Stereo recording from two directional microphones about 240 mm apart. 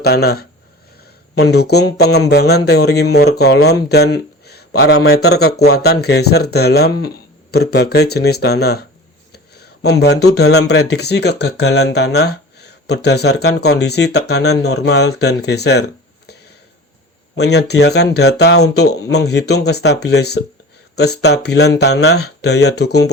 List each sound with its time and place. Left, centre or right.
0.0 s speech: left